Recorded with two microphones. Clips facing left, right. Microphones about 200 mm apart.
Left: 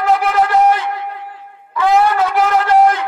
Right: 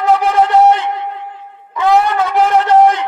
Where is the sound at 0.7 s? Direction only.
20° right (ahead or behind).